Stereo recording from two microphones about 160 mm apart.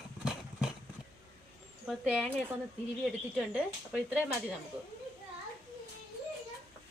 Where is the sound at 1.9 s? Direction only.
5° right (ahead or behind).